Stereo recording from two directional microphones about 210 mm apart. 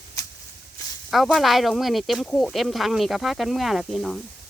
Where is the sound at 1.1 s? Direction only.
Centre (ahead or behind).